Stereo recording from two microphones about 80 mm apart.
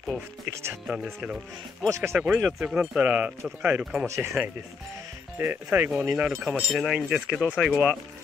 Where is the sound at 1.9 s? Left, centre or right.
Right.